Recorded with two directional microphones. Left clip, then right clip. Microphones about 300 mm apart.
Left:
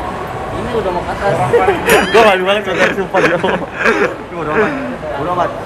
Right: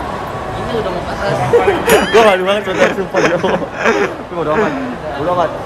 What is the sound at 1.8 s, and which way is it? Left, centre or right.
Speech, centre.